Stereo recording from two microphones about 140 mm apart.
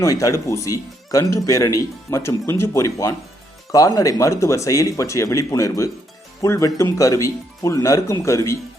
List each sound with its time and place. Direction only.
0.0 s speech: 25° left (ahead or behind)